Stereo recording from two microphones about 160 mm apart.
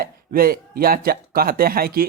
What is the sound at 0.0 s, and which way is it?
Speech, 65° right (ahead or behind).